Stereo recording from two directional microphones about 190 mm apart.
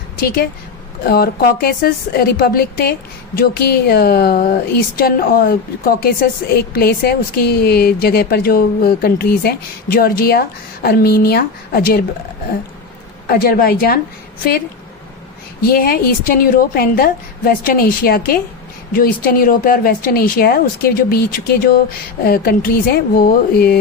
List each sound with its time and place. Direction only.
1.0 s a woman's voice: 50° left (ahead or behind)
13.2 s speech: 50° left (ahead or behind)
15.6 s speech: 50° left (ahead or behind)